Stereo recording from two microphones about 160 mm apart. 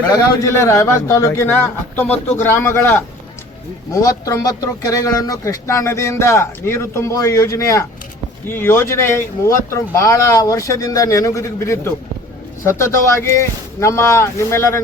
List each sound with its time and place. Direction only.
0.1 s speech: 15° left (ahead or behind)
4.0 s speech: 20° left (ahead or behind)